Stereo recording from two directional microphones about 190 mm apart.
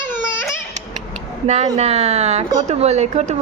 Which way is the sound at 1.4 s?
35° right (ahead or behind).